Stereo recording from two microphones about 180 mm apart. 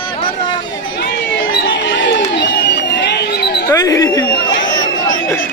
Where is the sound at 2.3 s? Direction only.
85° left; by 3.6 s 65° left (ahead or behind).